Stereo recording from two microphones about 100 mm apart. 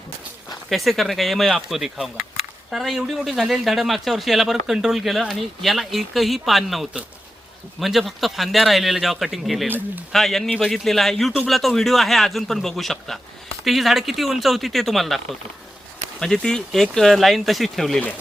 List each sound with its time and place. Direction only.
0.7 s speech: centre (ahead or behind)
9.6 s speech: 20° right (ahead or behind)
10.1 s speech: centre (ahead or behind)
16.2 s speech: 5° left (ahead or behind)